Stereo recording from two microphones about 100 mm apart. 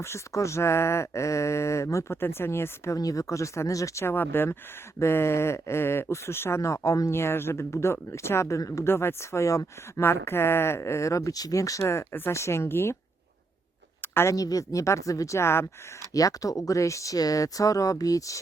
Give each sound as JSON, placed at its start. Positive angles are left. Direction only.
{"t": 0.0, "sound": "speech", "side_deg": 30}
{"t": 14.0, "sound": "a sound", "side_deg": 25}
{"t": 14.3, "sound": "speech", "side_deg": 35}